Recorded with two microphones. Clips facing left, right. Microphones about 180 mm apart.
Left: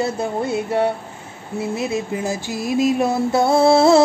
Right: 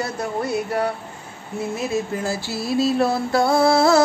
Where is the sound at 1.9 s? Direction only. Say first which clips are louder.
Left 1 dB; 20° left (ahead or behind).